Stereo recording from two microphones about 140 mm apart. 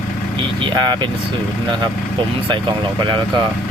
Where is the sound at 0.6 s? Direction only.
30° right (ahead or behind).